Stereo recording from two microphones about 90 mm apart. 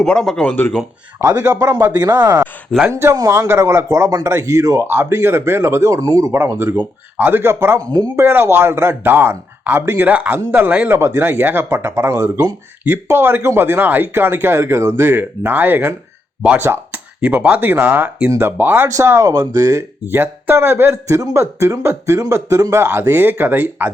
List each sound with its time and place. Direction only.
0.0 s speech: 5° left (ahead or behind)
2.1 s speech: 20° right (ahead or behind)
7.9 s speech: 45° right (ahead or behind)
8.2 s speech: 25° right (ahead or behind)
10.8 s speech: 25° right (ahead or behind)
12.8 s speech: 25° right (ahead or behind)
18.9 s speech: 30° right (ahead or behind)